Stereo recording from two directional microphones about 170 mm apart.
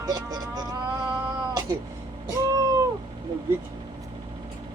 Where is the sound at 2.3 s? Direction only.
20° right (ahead or behind).